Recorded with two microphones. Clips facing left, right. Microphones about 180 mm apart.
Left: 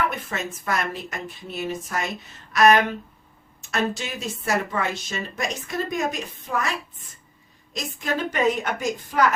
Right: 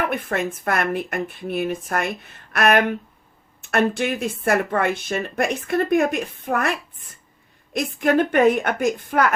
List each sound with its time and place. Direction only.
0.1 s speech: 60° right (ahead or behind)